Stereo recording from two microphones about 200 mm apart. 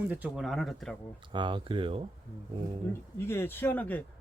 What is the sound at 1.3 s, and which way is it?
Speech, 25° right (ahead or behind).